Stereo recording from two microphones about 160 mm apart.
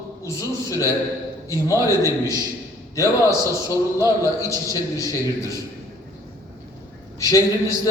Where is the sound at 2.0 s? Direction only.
20° left (ahead or behind).